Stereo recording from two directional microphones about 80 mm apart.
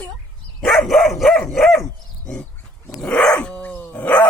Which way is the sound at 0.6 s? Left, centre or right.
Centre.